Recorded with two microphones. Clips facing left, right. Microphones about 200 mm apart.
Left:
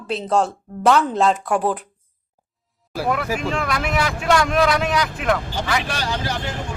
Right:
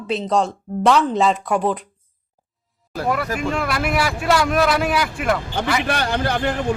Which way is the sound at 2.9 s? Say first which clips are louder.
Even; 5° left (ahead or behind).